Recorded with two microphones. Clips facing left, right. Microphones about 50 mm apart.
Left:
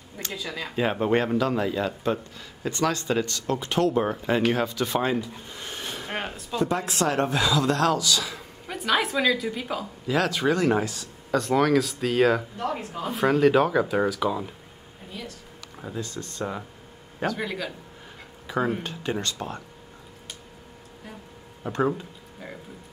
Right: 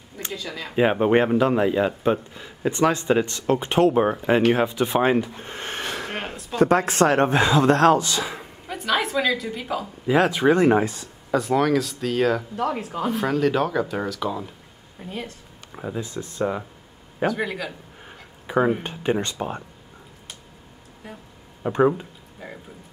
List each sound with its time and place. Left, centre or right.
0.3 s speech: centre
0.7 s speech: right
5.0 s speech: right
5.9 s a sound: right
6.5 s speech: right
8.6 s speech: centre
10.0 s speech: right
11.3 s speech: centre
12.5 s speech: right
13.1 s speech: centre
15.0 s speech: right
15.7 s speech: centre
18.8 s speech: right
21.6 s speech: centre